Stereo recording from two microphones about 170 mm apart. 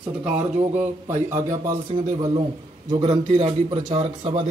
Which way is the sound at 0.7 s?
10° right (ahead or behind).